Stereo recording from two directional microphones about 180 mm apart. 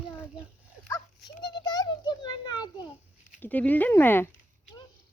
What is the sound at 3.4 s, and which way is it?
Speech, 10° left (ahead or behind).